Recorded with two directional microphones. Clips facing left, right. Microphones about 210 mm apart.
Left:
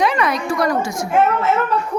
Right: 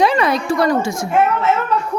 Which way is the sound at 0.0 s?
30° right (ahead or behind).